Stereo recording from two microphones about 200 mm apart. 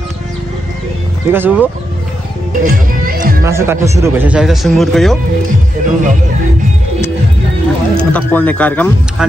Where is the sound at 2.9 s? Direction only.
45° right (ahead or behind).